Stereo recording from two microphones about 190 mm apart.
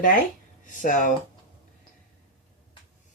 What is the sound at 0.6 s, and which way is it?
Speech, 45° left (ahead or behind).